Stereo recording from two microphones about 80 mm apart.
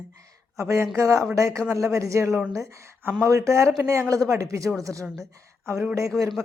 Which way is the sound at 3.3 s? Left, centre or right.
Right.